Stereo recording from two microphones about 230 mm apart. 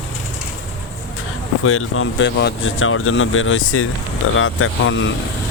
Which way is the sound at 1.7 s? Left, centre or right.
Left.